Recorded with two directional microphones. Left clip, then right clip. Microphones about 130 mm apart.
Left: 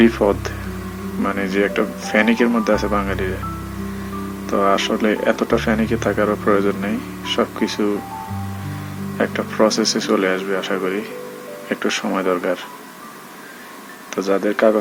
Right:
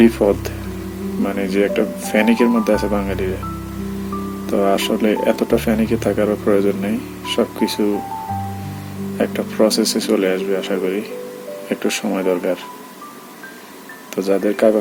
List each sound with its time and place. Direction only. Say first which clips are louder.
0.2 s speech: right 1 dB; 5° right (ahead or behind)
1.2 s speech: right 1 dB; 20° right (ahead or behind)
4.4 s speech: even; 20° right (ahead or behind)
9.1 s speech: even; 15° right (ahead or behind)
14.2 s speech: right 1 dB; 20° right (ahead or behind)